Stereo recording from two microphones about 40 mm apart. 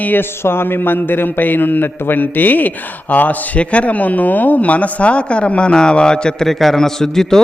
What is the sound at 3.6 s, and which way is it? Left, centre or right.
A man's voice, left.